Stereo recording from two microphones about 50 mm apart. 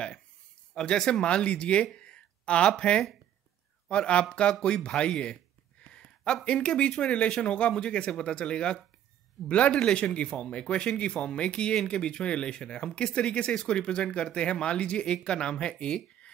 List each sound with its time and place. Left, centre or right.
0.7 s speech: centre
2.0 s a sound: centre
3.9 s speech: left